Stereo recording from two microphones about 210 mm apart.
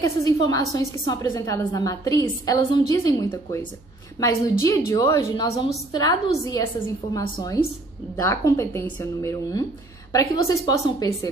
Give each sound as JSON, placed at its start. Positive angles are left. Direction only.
{"t": 0.5, "sound": "a woman's voice", "side_deg": 15}